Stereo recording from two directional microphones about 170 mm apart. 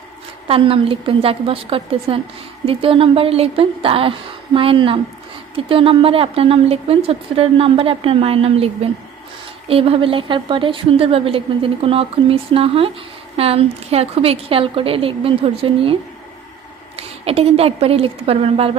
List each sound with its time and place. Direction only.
0.4 s a woman's voice: 35° right (ahead or behind)
17.0 s a woman's voice: 35° right (ahead or behind)